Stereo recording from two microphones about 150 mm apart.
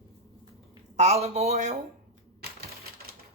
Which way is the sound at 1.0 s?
45° right (ahead or behind).